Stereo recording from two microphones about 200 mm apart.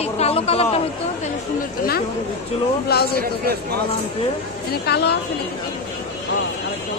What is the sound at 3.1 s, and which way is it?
Speech, 50° right (ahead or behind).